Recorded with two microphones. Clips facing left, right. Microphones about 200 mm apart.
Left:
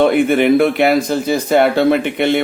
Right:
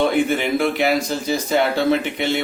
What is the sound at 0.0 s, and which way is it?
Speech, 60° left (ahead or behind).